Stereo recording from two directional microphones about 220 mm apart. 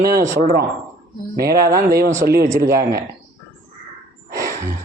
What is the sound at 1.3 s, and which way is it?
Speech, 45° right (ahead or behind).